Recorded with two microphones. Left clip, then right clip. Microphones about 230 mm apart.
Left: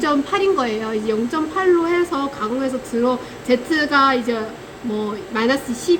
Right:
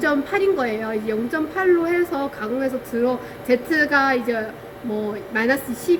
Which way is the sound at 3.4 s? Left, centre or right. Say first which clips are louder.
Even; centre.